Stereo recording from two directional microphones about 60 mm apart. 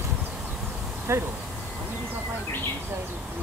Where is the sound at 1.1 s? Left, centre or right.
Right.